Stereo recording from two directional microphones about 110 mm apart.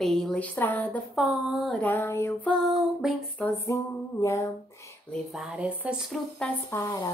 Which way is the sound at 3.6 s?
30° left (ahead or behind).